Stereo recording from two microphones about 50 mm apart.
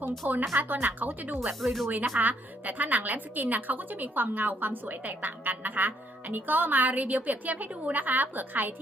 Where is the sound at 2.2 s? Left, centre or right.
Right.